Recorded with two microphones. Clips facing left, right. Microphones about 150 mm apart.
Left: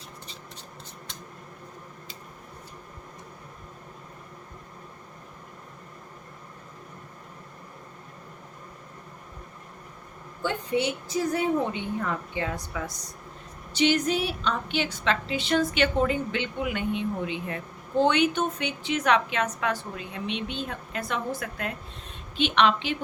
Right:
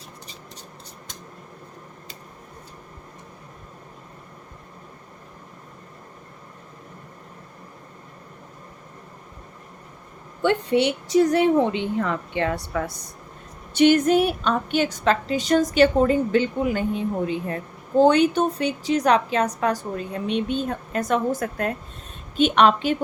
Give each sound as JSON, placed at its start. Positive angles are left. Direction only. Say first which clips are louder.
{"t": 10.4, "sound": "a woman's voice", "louder": "right 7 dB", "side_deg": -70}